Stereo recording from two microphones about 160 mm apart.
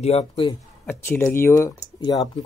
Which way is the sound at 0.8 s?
15° left (ahead or behind).